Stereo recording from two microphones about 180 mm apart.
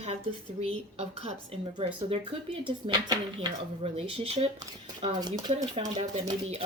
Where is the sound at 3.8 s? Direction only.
35° right (ahead or behind).